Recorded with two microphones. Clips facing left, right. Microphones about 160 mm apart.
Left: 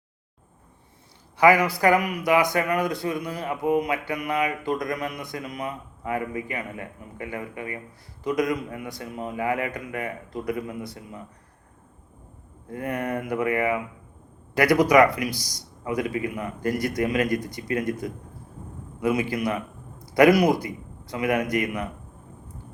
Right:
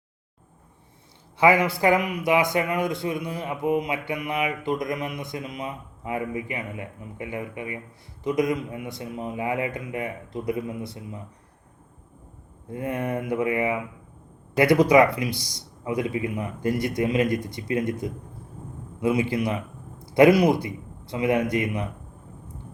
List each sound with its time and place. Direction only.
1.4 s a man's voice: 25° right (ahead or behind)
12.6 s a man's voice: 20° right (ahead or behind)